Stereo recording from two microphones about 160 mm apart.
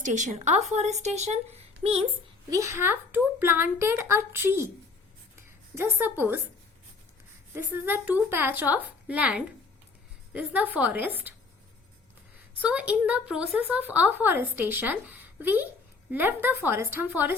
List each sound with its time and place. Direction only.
0.0 s speech: 50° right (ahead or behind)
2.5 s speech: 20° right (ahead or behind)
5.7 s speech: 15° right (ahead or behind)
7.5 s speech: 15° right (ahead or behind)
12.5 s speech: 10° right (ahead or behind)